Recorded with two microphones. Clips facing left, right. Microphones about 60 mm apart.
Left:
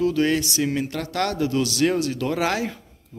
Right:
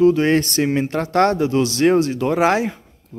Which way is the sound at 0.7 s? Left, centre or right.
Right.